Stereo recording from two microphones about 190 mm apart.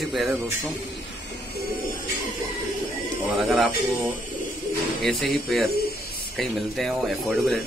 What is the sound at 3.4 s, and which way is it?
Speech, centre (ahead or behind).